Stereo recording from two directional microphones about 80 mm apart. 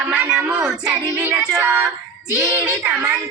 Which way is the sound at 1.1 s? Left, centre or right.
Right.